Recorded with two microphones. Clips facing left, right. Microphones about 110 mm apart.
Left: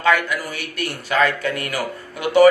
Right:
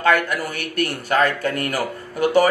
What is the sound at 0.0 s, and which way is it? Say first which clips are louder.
Speech: even; 50° right (ahead or behind).